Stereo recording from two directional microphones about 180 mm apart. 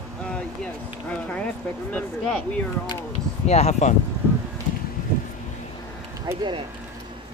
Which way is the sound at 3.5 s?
40° left (ahead or behind).